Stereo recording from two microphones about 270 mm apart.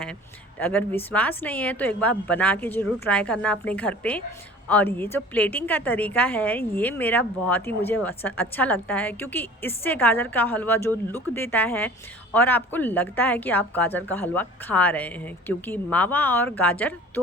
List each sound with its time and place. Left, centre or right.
0.6 s a woman's voice: centre